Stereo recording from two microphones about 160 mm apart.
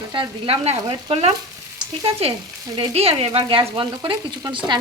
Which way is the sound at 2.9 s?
35° right (ahead or behind).